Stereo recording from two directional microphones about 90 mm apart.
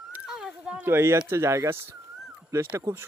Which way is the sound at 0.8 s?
25° right (ahead or behind).